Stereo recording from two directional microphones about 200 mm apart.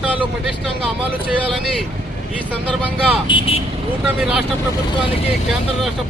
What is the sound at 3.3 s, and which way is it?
Speech, 30° left (ahead or behind).